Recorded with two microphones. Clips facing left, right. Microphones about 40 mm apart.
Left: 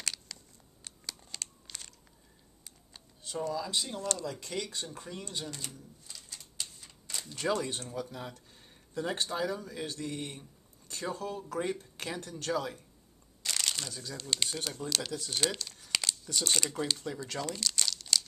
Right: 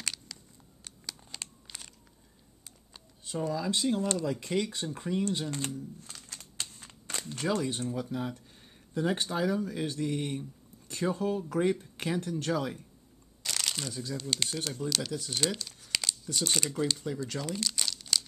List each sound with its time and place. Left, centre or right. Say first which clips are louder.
0.0 s a sound: right 1 dB; centre
1.4 s crunch: even; centre
2.9 s speech: right 2 dB; centre
5.9 s crumpling: right 2 dB; right
7.8 s speech: right 6 dB; centre
13.4 s speech: even; centre
17.6 s crumpling: even; centre